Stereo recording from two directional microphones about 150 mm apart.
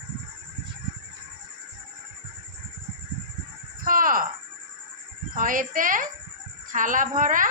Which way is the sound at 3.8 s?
70° right (ahead or behind).